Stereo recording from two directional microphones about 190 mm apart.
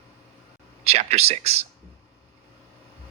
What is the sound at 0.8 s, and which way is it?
Speech, 35° right (ahead or behind).